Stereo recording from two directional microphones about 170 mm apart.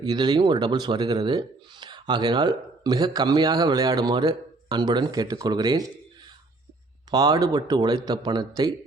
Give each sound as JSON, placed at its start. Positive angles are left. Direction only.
{"t": 0.0, "sound": "speech", "side_deg": -25}
{"t": 7.1, "sound": "speech", "side_deg": -20}